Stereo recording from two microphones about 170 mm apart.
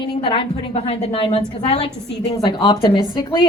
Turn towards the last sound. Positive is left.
turn(degrees=25)  # may be behind; listen again after turning